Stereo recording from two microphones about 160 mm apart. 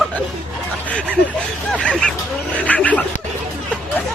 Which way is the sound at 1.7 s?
5° left (ahead or behind).